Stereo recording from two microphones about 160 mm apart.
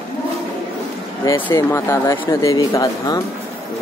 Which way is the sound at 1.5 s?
20° left (ahead or behind).